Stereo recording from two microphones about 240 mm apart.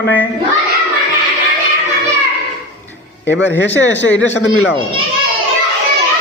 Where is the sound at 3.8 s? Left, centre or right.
Left.